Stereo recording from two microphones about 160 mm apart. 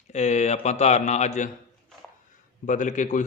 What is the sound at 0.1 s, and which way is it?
Music, 45° left (ahead or behind).